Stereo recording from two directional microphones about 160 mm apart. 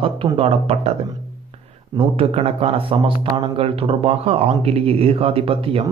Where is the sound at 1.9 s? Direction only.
35° right (ahead or behind).